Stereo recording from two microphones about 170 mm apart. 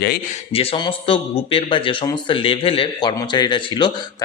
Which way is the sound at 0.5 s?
35° left (ahead or behind).